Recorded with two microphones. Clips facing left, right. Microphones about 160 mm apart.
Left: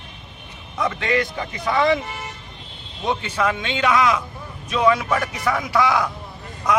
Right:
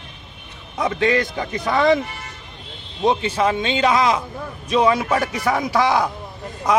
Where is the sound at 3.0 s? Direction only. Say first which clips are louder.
Right 4 dB; 30° right (ahead or behind).